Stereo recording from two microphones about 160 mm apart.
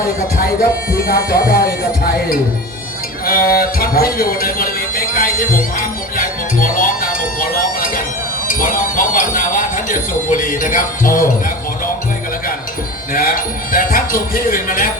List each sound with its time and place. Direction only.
0.3 s speech: 65° left (ahead or behind)
3.2 s speech: 65° left (ahead or behind)
8.4 s speech: 55° left (ahead or behind)
13.1 s speech: 60° left (ahead or behind)